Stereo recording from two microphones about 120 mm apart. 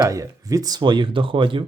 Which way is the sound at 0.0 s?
30° right (ahead or behind).